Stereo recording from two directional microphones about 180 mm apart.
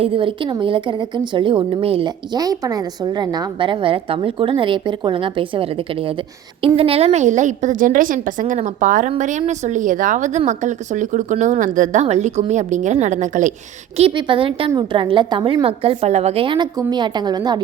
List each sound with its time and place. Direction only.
0.0 s a woman's voice: 30° right (ahead or behind)
13.9 s a woman's voice: 30° right (ahead or behind)